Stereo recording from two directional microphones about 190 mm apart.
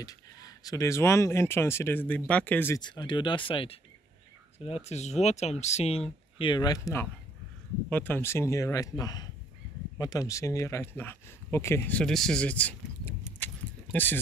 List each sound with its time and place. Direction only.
0.0 s speech: 20° left (ahead or behind)
2.8 s speech: 25° left (ahead or behind)